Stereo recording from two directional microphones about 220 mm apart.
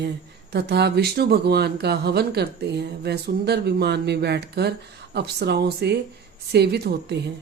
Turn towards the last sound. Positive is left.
turn(degrees=-50)  # may be behind; listen again after turning